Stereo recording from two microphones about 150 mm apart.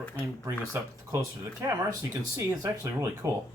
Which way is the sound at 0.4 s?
15° right (ahead or behind).